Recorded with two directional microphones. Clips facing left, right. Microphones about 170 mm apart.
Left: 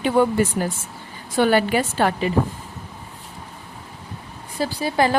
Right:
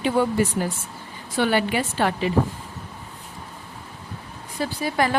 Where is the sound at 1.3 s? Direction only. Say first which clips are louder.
Left 4 dB; 45° left (ahead or behind).